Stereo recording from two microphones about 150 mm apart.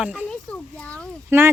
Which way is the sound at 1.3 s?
15° right (ahead or behind).